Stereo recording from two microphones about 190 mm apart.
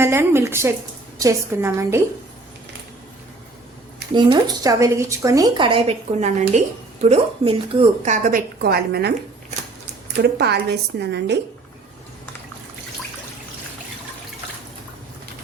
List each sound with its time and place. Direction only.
0.0 s a woman's voice: 15° right (ahead or behind)
4.1 s a woman's voice: 20° right (ahead or behind); by 9.1 s 60° right (ahead or behind)
10.2 s a woman's voice: 60° right (ahead or behind)